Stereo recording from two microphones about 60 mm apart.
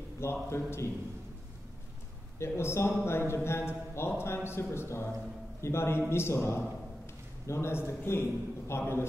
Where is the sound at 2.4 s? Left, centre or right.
Left.